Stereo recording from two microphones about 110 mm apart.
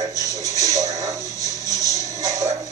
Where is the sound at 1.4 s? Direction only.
30° left (ahead or behind).